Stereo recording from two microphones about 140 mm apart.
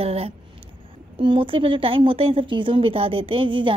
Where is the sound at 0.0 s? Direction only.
45° right (ahead or behind).